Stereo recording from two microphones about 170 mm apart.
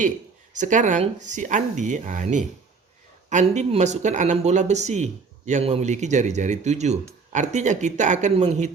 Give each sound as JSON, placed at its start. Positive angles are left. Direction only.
{"t": 0.5, "sound": "speech", "side_deg": -45}